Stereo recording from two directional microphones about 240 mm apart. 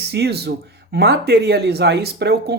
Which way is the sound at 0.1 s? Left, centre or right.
Right.